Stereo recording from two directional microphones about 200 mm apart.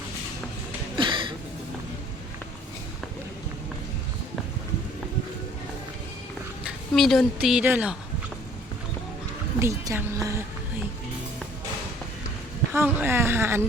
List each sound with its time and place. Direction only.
0.9 s a sound: 25° right (ahead or behind)
6.7 s a woman's voice: centre (ahead or behind)
9.6 s a woman's voice: 15° right (ahead or behind)
12.7 s a woman's voice: 10° right (ahead or behind)